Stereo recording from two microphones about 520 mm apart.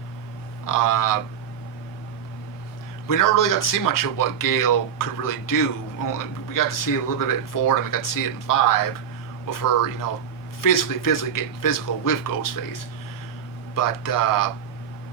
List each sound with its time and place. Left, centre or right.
0.6 s speech: left
3.1 s speech: left
13.7 s speech: left